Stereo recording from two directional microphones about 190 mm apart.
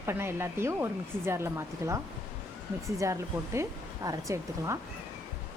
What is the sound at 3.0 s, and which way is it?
Speech, 15° right (ahead or behind).